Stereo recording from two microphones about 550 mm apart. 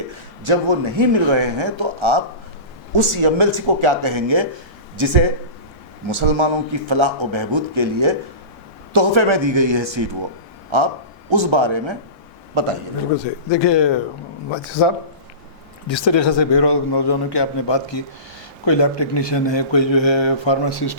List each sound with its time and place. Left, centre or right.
0.1 s speech: right
12.5 s a man's voice: right
13.1 s a man's voice: left